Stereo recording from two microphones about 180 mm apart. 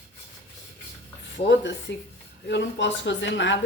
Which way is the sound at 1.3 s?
75° left (ahead or behind).